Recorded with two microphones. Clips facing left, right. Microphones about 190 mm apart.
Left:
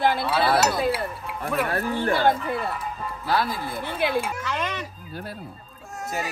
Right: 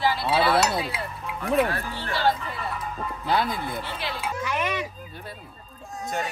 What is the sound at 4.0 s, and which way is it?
Speech, 55° left (ahead or behind).